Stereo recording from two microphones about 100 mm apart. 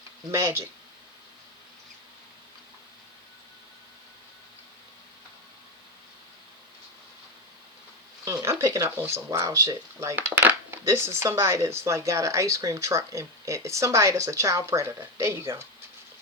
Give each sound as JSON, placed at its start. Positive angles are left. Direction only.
{"t": 0.3, "sound": "speech", "side_deg": -30}
{"t": 8.2, "sound": "speech", "side_deg": -35}